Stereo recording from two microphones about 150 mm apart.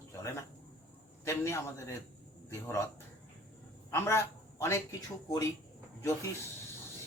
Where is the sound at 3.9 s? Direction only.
15° left (ahead or behind).